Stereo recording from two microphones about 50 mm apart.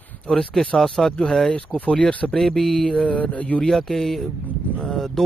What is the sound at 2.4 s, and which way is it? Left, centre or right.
Mantra, centre.